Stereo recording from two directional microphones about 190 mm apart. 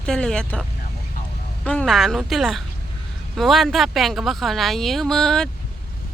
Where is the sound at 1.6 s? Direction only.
5° left (ahead or behind).